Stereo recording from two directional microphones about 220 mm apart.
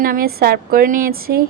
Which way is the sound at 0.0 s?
40° right (ahead or behind).